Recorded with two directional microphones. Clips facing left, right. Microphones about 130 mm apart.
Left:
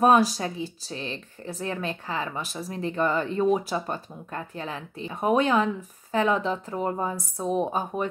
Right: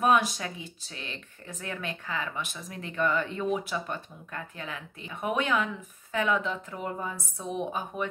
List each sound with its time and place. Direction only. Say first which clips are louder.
0.0 s speech: left 5 dB; 35° left (ahead or behind)